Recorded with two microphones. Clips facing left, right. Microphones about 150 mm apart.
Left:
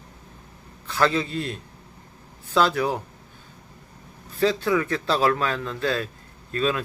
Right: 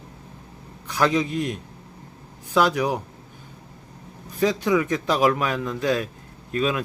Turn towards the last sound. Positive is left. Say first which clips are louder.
# right 1 dB
turn(degrees=-15)  # may be behind; listen again after turning